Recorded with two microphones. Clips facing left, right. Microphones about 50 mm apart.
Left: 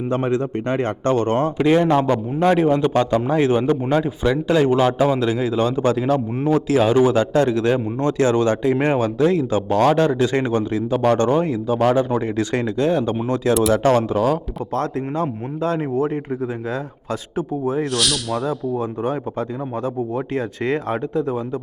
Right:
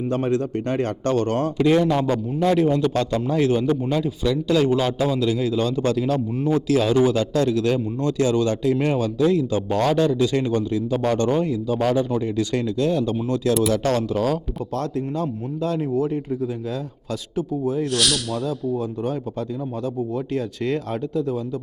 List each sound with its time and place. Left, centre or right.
0.1 s a man's voice: left
13.5 s speech: centre
13.8 s a man's voice: left
17.9 s speech: centre
18.8 s a man's voice: left